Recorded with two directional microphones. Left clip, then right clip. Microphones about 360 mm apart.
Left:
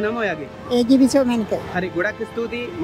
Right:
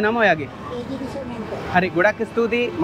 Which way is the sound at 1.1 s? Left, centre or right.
Left.